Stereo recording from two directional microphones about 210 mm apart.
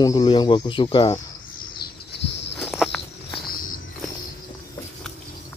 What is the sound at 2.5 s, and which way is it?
Walk, 5° left (ahead or behind).